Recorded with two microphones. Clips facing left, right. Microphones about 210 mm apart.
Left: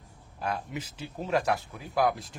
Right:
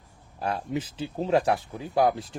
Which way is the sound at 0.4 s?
30° right (ahead or behind).